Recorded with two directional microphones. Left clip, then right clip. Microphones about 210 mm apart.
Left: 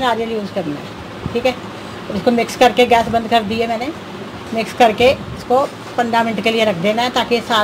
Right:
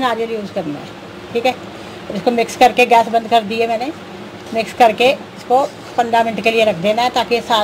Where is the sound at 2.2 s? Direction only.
5° right (ahead or behind).